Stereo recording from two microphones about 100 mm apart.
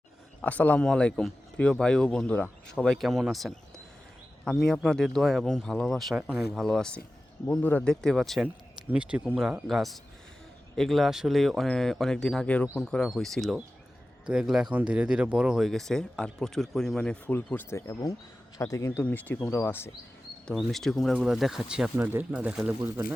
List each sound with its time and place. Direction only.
0.4 s speech: 15° left (ahead or behind)
4.7 s speech: 5° left (ahead or behind)
6.1 s speech: 10° right (ahead or behind)
6.5 s speech: 5° left (ahead or behind)
7.4 s speech: 20° left (ahead or behind); by 8.4 s centre (ahead or behind)
8.9 s speech: 10° right (ahead or behind); by 17.3 s 10° left (ahead or behind)
17.3 s speech: 20° left (ahead or behind)
20.5 s speech: centre (ahead or behind)
21.9 s speech: 20° right (ahead or behind)
22.3 s speech: 10° right (ahead or behind)